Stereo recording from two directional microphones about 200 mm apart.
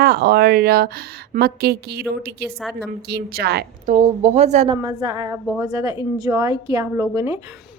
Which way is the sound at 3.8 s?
35° right (ahead or behind).